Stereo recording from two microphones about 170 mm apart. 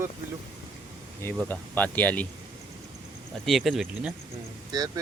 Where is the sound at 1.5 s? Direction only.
10° left (ahead or behind).